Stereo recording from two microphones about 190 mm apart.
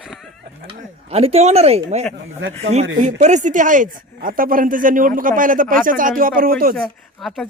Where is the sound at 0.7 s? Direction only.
30° right (ahead or behind); by 6.7 s 50° right (ahead or behind).